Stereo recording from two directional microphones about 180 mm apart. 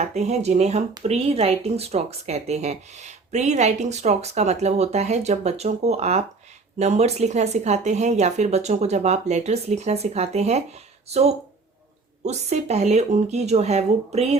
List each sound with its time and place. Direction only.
0.0 s speech: 40° right (ahead or behind)